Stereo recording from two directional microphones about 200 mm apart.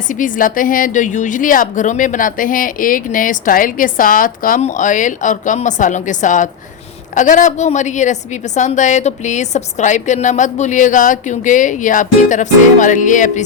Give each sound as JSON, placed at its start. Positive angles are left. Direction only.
{"t": 0.1, "sound": "a woman's voice", "side_deg": 40}